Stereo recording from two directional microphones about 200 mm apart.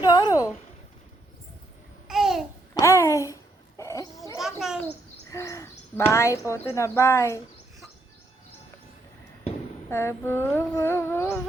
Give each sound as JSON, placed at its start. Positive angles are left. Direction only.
{"t": 0.0, "sound": "a sound", "side_deg": 20}
{"t": 2.0, "sound": "babbling", "side_deg": 0}
{"t": 2.7, "sound": "a sound", "side_deg": 15}
{"t": 4.4, "sound": "gargling", "side_deg": 0}
{"t": 5.3, "sound": "owl", "side_deg": 15}
{"t": 6.1, "sound": "humming", "side_deg": 15}
{"t": 9.9, "sound": "humming", "side_deg": 10}